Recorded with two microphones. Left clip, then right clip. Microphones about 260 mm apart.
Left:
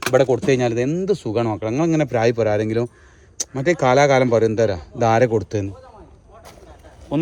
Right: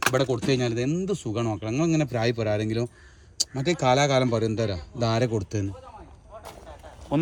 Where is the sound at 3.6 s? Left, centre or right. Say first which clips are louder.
Left 7 dB; left.